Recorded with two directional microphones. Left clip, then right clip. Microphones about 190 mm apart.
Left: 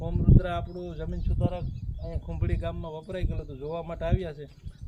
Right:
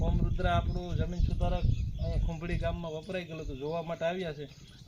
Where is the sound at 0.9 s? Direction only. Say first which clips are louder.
Left 1 dB; 20° left (ahead or behind).